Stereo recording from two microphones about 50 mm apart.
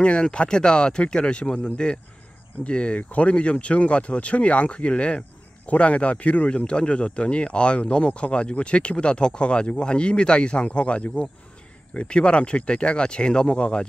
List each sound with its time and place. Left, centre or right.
0.0 s speech: left